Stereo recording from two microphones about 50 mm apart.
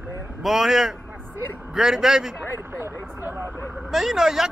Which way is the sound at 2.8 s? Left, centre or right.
Right.